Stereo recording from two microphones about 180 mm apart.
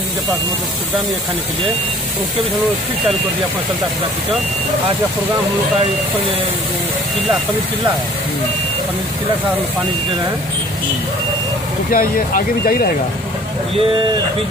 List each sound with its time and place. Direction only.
11.9 s speech: 50° left (ahead or behind)